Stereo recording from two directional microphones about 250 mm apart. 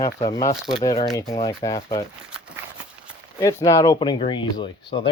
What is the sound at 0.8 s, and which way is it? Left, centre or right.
Speech, centre.